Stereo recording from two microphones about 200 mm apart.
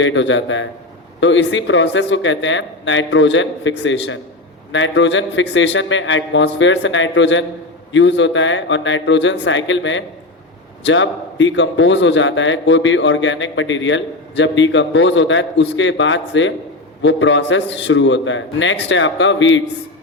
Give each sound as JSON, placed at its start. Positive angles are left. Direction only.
{"t": 0.0, "sound": "a man's voice", "side_deg": 65}